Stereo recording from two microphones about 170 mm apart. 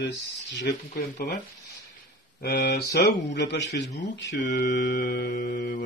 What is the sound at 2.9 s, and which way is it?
Speech, 85° left.